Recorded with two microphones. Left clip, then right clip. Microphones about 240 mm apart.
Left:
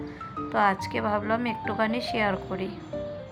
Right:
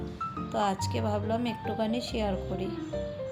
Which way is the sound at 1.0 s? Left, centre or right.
Centre.